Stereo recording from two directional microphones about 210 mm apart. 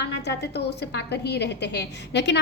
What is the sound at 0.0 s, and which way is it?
A woman's voice, 55° left (ahead or behind).